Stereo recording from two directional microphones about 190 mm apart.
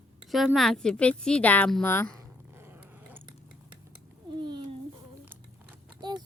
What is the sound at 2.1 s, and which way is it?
Dog, 10° right (ahead or behind).